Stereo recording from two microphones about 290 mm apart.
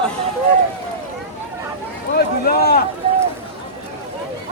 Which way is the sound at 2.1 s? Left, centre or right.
Left.